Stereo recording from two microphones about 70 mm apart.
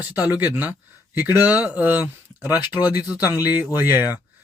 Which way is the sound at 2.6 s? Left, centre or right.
Left.